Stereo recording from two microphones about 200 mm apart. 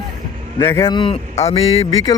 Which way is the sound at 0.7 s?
20° left (ahead or behind).